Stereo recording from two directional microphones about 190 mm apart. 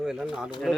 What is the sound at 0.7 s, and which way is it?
Speech, 5° right (ahead or behind).